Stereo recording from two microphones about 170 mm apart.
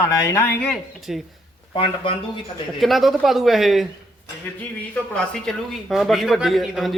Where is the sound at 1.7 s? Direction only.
30° left (ahead or behind).